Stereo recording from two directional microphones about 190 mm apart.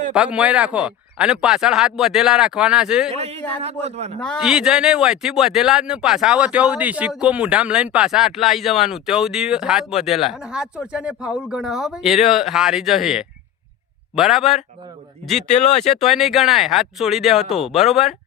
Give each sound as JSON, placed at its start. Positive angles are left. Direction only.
{"t": 0.1, "sound": "speech", "side_deg": -5}
{"t": 3.1, "sound": "speech", "side_deg": -35}
{"t": 4.2, "sound": "speech", "side_deg": 0}
{"t": 15.4, "sound": "speech", "side_deg": 35}
{"t": 16.0, "sound": "speech", "side_deg": 0}